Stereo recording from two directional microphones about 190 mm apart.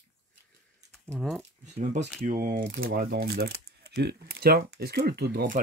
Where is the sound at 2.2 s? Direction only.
45° right (ahead or behind).